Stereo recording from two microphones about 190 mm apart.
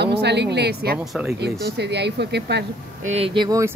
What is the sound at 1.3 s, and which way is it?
Speech, 60° right (ahead or behind).